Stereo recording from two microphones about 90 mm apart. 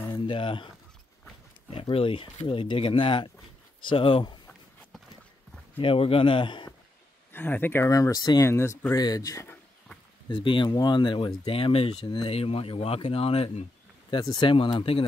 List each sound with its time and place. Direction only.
0.1 s speech: 65° left (ahead or behind)
1.7 s speech: 85° left; by 4.4 s 60° left (ahead or behind)
5.8 s speech: 90° left; by 6.7 s 60° left (ahead or behind)
7.3 s speech: 20° left (ahead or behind)
7.9 s speech: 40° left (ahead or behind)
8.9 s speech: 45° left (ahead or behind)
10.3 s speech: 70° left (ahead or behind)
10.7 s speech: 55° left (ahead or behind); by 13.5 s 90° left
14.1 s speech: 55° left (ahead or behind)
14.8 s speech: 90° left